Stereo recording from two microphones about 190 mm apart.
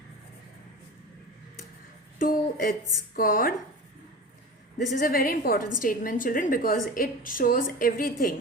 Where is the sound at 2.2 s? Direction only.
45° left (ahead or behind).